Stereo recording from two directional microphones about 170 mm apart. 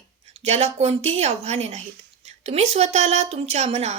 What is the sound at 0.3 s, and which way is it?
A woman's voice, 40° right (ahead or behind).